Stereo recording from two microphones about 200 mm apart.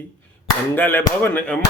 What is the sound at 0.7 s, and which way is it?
Speech, 10° left (ahead or behind).